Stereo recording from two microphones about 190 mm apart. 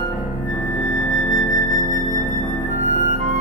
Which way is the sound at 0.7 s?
50° right (ahead or behind).